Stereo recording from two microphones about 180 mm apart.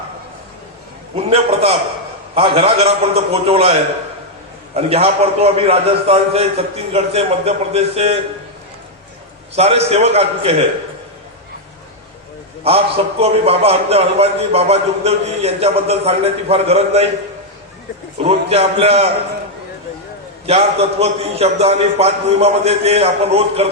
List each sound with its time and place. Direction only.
1.1 s a man's voice: 35° right (ahead or behind)
9.6 s a man's voice: 35° right (ahead or behind)
12.6 s a man's voice: 35° right (ahead or behind)
18.2 s a man's voice: 30° right (ahead or behind)
20.5 s a man's voice: 35° right (ahead or behind)